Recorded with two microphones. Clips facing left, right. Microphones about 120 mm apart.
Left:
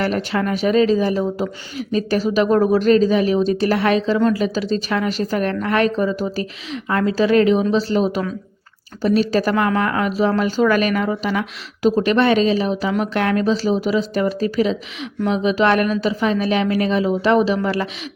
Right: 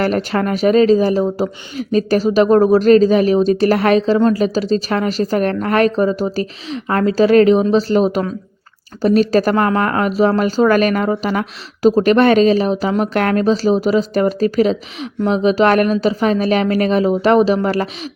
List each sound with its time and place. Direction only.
0.0 s speech: 45° right (ahead or behind)